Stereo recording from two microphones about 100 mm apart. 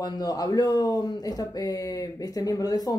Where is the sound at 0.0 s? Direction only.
40° left (ahead or behind).